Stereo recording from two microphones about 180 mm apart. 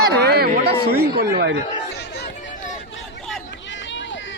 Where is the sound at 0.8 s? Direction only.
60° right (ahead or behind).